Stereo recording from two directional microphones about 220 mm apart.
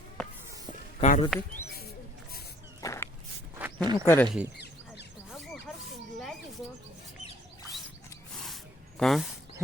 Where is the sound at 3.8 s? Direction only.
20° right (ahead or behind).